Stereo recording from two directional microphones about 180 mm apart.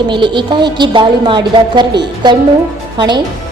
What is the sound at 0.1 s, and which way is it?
A woman's voice, 25° right (ahead or behind).